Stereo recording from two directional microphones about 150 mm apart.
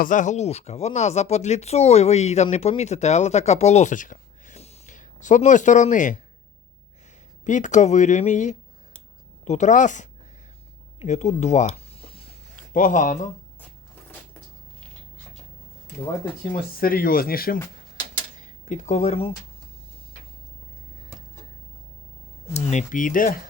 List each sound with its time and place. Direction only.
0.0 s speech: 60° left (ahead or behind)
7.4 s speech: 55° left (ahead or behind)
11.0 s a sound: 50° left (ahead or behind)
12.7 s speech: 60° left (ahead or behind)
16.5 s speech: 75° left (ahead or behind)
18.3 s speech: 55° left (ahead or behind)
22.5 s speech: 55° left (ahead or behind)